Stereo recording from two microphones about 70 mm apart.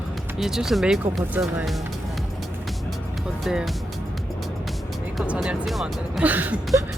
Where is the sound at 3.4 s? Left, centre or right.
Centre.